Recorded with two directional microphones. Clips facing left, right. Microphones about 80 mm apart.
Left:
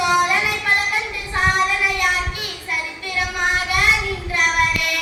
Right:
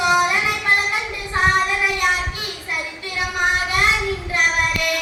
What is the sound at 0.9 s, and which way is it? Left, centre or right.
Child singing, right.